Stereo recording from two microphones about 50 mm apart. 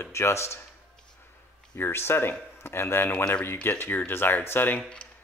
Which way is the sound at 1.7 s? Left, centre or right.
Left.